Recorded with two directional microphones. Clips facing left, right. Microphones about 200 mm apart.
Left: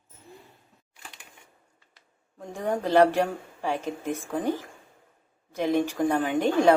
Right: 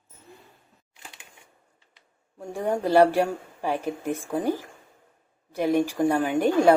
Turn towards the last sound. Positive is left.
turn(degrees=-10)  # may be behind; listen again after turning